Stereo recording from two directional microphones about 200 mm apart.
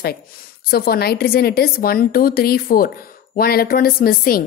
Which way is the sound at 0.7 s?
50° left (ahead or behind).